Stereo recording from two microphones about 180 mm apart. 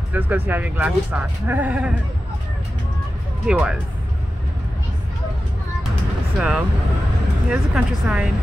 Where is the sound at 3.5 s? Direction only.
5° right (ahead or behind).